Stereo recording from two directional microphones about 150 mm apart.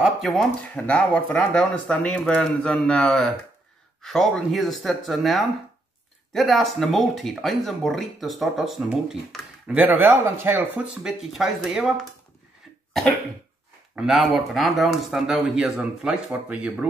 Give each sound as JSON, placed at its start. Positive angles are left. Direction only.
{"t": 0.0, "sound": "speech", "side_deg": 0}
{"t": 13.9, "sound": "speech", "side_deg": 0}